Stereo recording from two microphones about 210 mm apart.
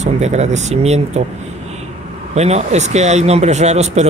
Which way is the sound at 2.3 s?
30° right (ahead or behind).